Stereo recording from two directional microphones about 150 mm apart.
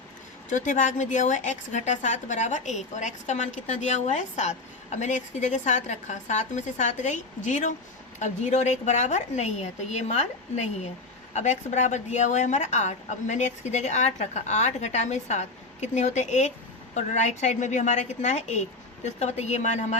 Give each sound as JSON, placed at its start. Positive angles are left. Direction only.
{"t": 0.5, "sound": "a woman's voice", "side_deg": 55}